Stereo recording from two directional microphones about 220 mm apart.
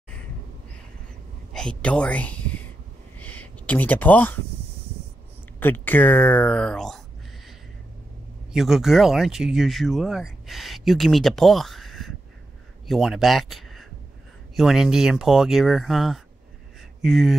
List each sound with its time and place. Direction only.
1.5 s speech: 5° left (ahead or behind)
3.2 s a sound: 5° left (ahead or behind)
5.6 s speech: 10° left (ahead or behind)
8.5 s speech: centre (ahead or behind)